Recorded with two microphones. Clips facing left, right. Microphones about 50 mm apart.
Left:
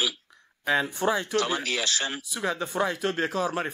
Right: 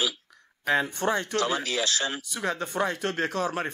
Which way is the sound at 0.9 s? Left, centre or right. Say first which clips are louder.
Left 1 dB; centre.